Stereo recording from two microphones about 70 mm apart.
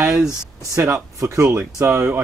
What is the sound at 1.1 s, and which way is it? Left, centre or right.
Speech, right.